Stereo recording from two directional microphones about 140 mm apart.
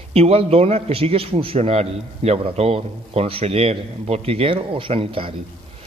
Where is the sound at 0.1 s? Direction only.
45° right (ahead or behind).